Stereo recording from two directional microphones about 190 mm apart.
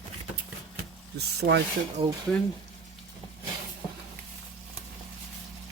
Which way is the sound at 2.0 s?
30° right (ahead or behind).